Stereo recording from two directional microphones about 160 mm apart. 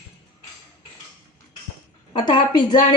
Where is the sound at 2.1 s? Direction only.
30° left (ahead or behind).